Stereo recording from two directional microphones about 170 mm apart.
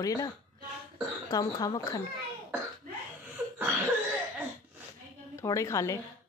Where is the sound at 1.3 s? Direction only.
20° left (ahead or behind).